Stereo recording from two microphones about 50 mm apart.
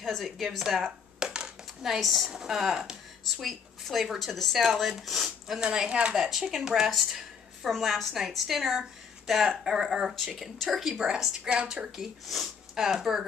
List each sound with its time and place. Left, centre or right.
0.0 s a woman's voice: centre
1.2 s a sound: centre
2.0 s a woman's voice: centre
3.3 s a woman's voice: centre
5.6 s a woman's voice: centre
6.1 s speech: centre
7.1 s a sound: centre
7.7 s a woman's voice: centre
10.1 s a woman's voice: centre
11.4 s speech: centre